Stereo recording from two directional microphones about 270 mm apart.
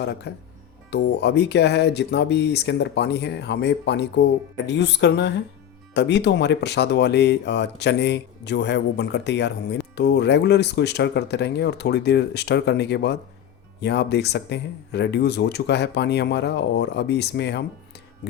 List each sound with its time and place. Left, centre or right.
0.3 s speech: left